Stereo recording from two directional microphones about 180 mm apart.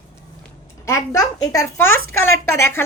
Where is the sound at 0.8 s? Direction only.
15° left (ahead or behind).